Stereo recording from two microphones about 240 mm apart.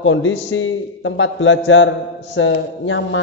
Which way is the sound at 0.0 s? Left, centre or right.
Left.